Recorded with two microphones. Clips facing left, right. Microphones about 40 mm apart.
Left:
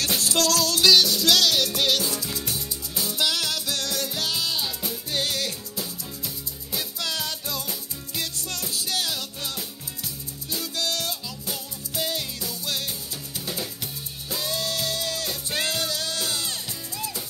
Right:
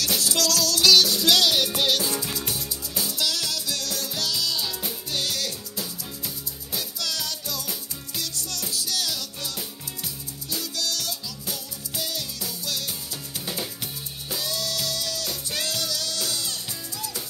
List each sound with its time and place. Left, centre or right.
0.2 s music: left
0.9 s music: centre
2.0 s music: right
3.2 s music: left
5.8 s music: centre
6.8 s music: left
10.5 s music: left
14.4 s music: left